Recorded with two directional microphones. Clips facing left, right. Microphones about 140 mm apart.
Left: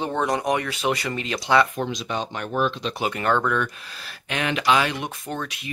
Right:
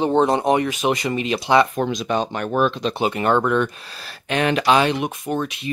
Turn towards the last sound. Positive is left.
turn(degrees=-20)  # may be behind; listen again after turning